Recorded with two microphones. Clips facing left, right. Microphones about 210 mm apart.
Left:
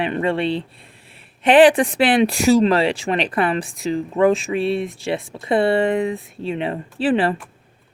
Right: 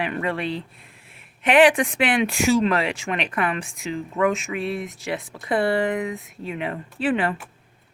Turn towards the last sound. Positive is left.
turn(degrees=30)  # may be behind; listen again after turning